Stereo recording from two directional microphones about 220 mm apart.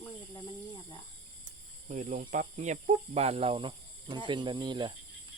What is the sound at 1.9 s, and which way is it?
Speech, 35° right (ahead or behind).